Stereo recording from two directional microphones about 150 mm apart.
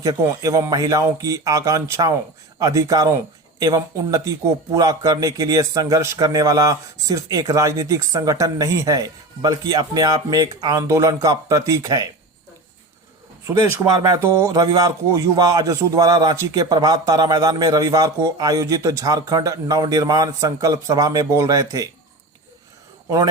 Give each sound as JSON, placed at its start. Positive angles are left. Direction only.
{"t": 0.0, "sound": "speech", "side_deg": -25}
{"t": 13.5, "sound": "speech", "side_deg": -20}
{"t": 23.0, "sound": "speech", "side_deg": -25}